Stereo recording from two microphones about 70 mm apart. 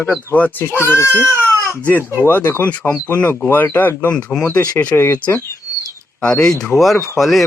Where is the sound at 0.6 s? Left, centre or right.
Left.